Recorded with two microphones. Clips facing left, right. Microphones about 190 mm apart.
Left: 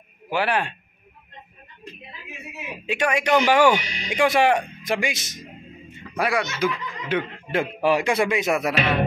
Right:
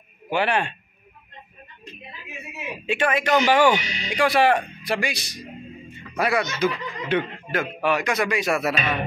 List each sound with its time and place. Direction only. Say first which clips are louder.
0.3 s a man's voice: right 1 dB; 5° left (ahead or behind)
2.9 s speech: even; 10° left (ahead or behind)
3.8 s speech: right 2 dB; 50° left (ahead or behind)
4.1 s speech: even; 20° left (ahead or behind)
6.1 s speech: right 1 dB; 10° left (ahead or behind)
7.5 s speech: left 3 dB; 30° left (ahead or behind)
8.7 s music: left 4 dB; 75° left (ahead or behind)